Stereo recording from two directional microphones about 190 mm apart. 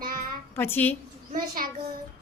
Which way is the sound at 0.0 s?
45° right (ahead or behind).